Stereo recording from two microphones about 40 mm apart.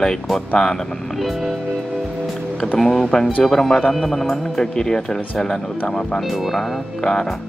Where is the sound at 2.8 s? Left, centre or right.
Centre.